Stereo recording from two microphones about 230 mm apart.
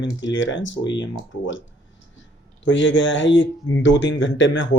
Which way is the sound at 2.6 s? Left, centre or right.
Left.